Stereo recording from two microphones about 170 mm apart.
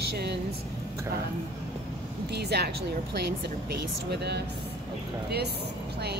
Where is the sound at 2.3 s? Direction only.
75° right (ahead or behind).